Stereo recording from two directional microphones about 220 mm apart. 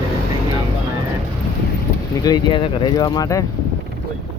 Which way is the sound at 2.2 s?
20° left (ahead or behind).